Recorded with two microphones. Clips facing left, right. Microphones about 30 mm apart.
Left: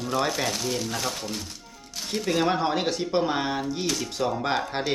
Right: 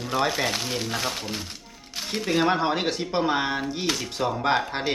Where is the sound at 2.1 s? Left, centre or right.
Centre.